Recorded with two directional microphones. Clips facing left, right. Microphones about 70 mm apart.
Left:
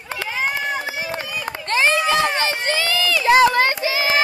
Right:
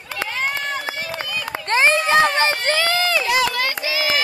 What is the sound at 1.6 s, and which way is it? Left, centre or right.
Run, right.